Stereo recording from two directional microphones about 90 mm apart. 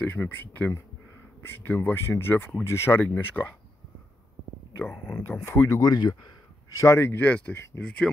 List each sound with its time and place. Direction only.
0.0 s speech: 25° left (ahead or behind)
5.0 s speech: 20° left (ahead or behind)
5.7 s speech: 45° left (ahead or behind)
6.7 s speech: 35° left (ahead or behind); by 7.6 s 20° left (ahead or behind)
8.0 s speech: centre (ahead or behind)